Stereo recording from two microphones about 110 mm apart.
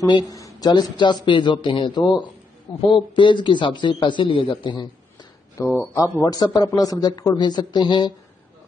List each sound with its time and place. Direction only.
0.0 s speech: 30° left (ahead or behind)
0.9 s speech: 45° left (ahead or behind)
5.6 s speech: 30° left (ahead or behind); by 8.1 s 45° left (ahead or behind)